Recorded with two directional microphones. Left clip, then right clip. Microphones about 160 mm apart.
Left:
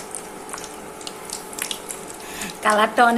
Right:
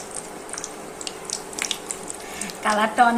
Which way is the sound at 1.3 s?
Centre (ahead or behind).